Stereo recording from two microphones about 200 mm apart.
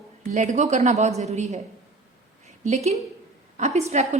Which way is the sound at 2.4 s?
35° right (ahead or behind).